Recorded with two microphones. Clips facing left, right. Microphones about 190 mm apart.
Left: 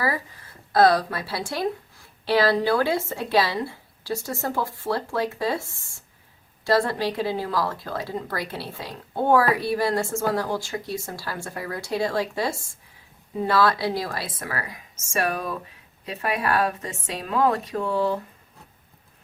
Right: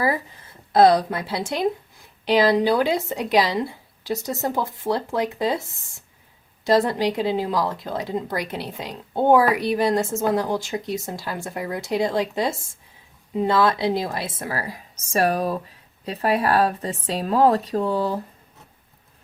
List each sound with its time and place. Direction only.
0.7 s speech: 20° right (ahead or behind)